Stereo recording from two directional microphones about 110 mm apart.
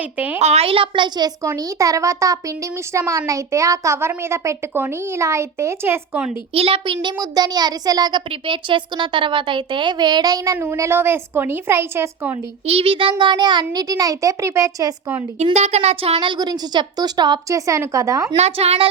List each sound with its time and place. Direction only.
0.0 s speech: 15° right (ahead or behind)
0.4 s speech: 65° right (ahead or behind); by 6.0 s 25° right (ahead or behind)
6.5 s a child's voice: 60° right (ahead or behind); by 8.2 s 35° right (ahead or behind)
8.3 s speech: 50° right (ahead or behind); by 10.6 s 35° right (ahead or behind)
10.6 s speech: 20° right (ahead or behind)
12.6 s a child's voice: 60° right (ahead or behind); by 14.9 s 30° right (ahead or behind)
15.5 s speech: 80° right; by 16.3 s 60° right (ahead or behind)
16.3 s a child's voice: 40° right (ahead or behind)
17.7 s speech: 30° right (ahead or behind)
18.3 s speech: 70° right (ahead or behind)